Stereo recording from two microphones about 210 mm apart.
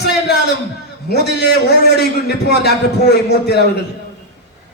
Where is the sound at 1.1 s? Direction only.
50° left (ahead or behind).